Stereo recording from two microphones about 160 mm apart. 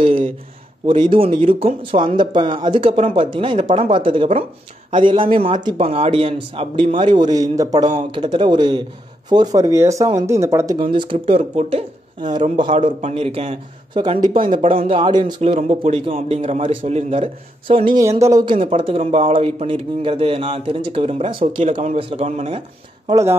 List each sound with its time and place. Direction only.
0.0 s a sound: 35° right (ahead or behind)
0.8 s a man's voice: 30° right (ahead or behind)
10.8 s speech: 30° right (ahead or behind)
12.8 s a man's voice: 40° right (ahead or behind)
15.4 s speech: 40° right (ahead or behind)
18.0 s speech: 20° right (ahead or behind); by 22.6 s 40° right (ahead or behind)
23.0 s speech: 20° right (ahead or behind)